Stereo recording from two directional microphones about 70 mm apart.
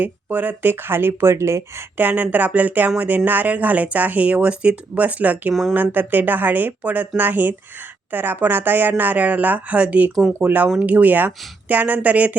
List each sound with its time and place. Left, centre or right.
0.0 s speech: right
2.0 s speech: right